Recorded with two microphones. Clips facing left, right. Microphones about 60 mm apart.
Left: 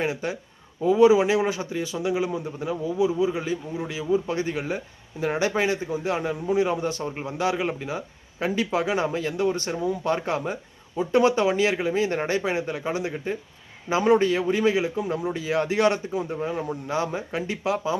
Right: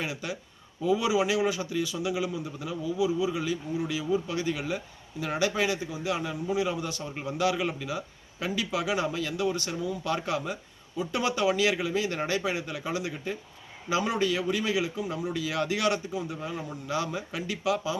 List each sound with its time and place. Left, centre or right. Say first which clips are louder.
0.0 s a man's voice: left 7 dB; left